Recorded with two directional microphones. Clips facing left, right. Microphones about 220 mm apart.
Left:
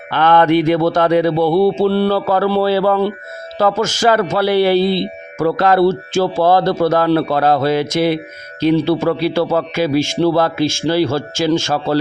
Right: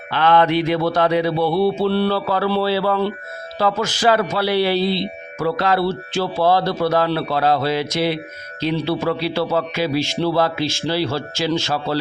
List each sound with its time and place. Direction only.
0.1 s a man's voice: 50° left (ahead or behind)